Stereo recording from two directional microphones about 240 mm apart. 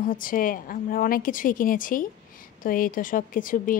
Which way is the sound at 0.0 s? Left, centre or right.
Left.